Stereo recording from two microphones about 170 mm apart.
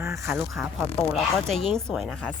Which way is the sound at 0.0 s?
15° right (ahead or behind).